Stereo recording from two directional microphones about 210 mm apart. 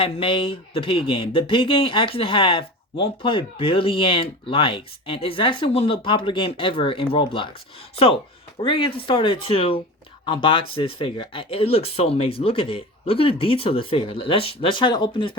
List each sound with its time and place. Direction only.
0.0 s speech: 25° left (ahead or behind)
8.6 s speech: 25° left (ahead or behind)